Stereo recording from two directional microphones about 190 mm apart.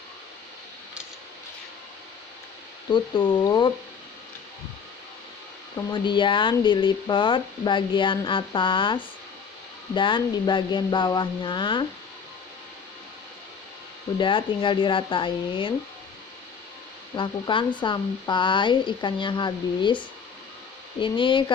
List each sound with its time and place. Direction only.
2.9 s speech: 25° left (ahead or behind)
5.7 s speech: 25° left (ahead or behind)
14.2 s speech: 25° left (ahead or behind)
17.2 s speech: 25° left (ahead or behind)